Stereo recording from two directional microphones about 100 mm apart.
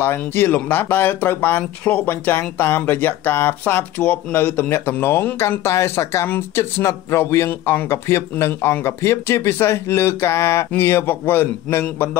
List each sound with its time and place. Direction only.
0.0 s speech: 20° left (ahead or behind)